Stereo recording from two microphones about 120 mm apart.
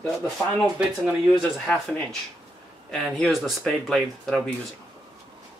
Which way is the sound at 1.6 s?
5° left (ahead or behind).